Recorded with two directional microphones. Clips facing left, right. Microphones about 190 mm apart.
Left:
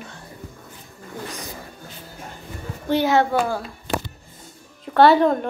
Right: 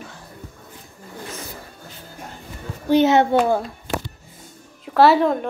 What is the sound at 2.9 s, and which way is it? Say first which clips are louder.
Speech: right 3 dB; 20° right (ahead or behind).